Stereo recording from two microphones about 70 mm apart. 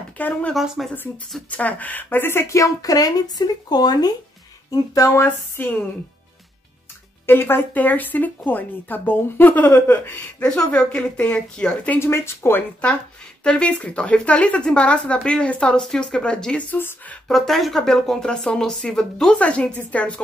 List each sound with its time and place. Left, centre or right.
0.2 s speech: left
0.8 s speech: centre
1.5 s speech: left
4.6 s speech: left
5.2 s speech: left
7.2 s speech: left
10.4 s speech: centre
12.0 s speech: left
13.4 s speech: centre
16.7 s speech: left
17.3 s speech: centre; by 20.2 s left